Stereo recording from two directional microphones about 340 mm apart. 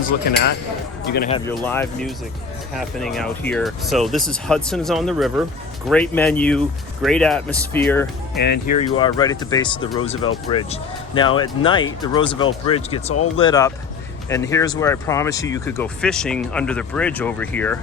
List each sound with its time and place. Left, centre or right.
1.0 s speech: left
1.3 s speech: centre
8.4 s speech: left; by 17.7 s centre